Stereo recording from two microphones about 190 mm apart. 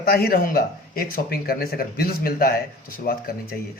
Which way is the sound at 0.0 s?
55° left (ahead or behind).